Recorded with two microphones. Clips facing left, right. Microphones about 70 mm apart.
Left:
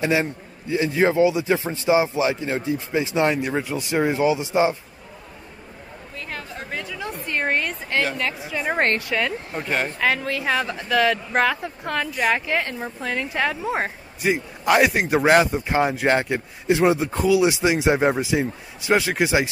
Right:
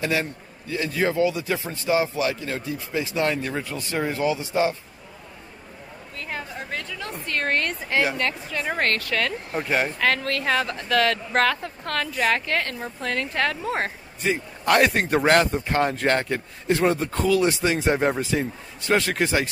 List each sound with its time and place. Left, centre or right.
0.0 s a man's voice: left
6.1 s a sound: centre
6.7 s a sound: centre
7.9 s a woman's voice: centre
8.3 s speech: centre
8.7 s a man's voice: left
9.5 s speech: centre